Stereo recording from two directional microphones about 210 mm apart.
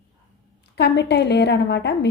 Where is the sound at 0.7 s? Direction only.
55° left (ahead or behind).